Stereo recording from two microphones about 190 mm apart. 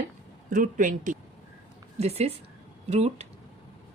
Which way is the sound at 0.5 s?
45° right (ahead or behind).